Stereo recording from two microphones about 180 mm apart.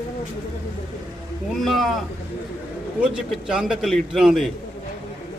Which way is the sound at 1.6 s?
Centre (ahead or behind).